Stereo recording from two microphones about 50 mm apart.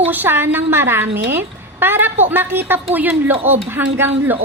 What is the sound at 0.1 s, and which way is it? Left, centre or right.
A woman's voice, right.